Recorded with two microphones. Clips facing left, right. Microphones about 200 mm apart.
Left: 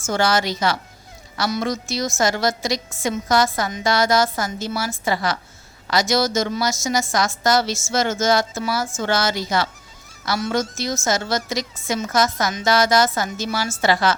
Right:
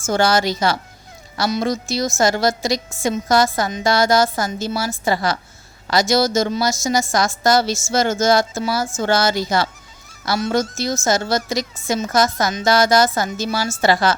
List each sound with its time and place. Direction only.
0.0 s a woman's voice: 35° right (ahead or behind)